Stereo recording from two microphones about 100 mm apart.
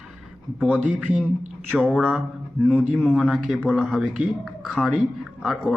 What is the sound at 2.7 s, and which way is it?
Speech, 15° right (ahead or behind).